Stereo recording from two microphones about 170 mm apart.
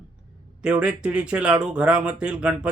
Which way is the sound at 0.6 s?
5° right (ahead or behind).